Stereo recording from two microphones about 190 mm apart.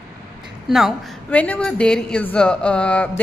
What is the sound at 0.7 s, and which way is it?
A woman's voice, centre (ahead or behind).